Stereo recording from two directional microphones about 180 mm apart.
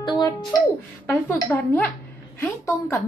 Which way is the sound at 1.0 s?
15° left (ahead or behind).